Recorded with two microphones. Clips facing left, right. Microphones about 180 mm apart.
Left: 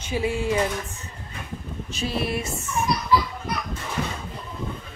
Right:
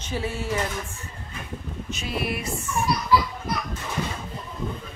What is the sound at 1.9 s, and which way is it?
Speech, 30° left (ahead or behind).